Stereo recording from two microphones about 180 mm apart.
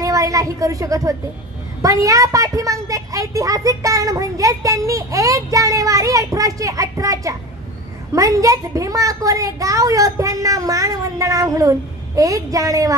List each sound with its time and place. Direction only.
0.0 s a woman's voice: 20° right (ahead or behind)